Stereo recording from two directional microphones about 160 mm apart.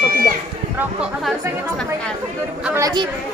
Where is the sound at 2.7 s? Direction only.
25° right (ahead or behind).